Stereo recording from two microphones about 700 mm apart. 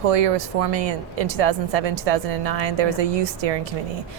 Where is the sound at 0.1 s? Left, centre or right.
Right.